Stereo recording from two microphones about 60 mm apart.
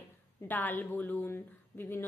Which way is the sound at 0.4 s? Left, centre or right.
Left.